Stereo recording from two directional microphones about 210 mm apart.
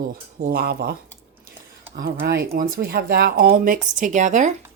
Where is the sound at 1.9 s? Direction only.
45° right (ahead or behind).